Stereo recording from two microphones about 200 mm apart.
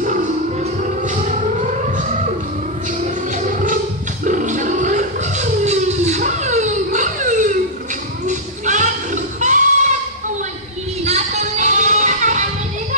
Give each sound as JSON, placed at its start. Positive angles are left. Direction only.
{"t": 0.0, "sound": "siren", "side_deg": -40}
{"t": 3.3, "sound": "a sound", "side_deg": -40}
{"t": 8.3, "sound": "child singing", "side_deg": -40}
{"t": 11.1, "sound": "music", "side_deg": -35}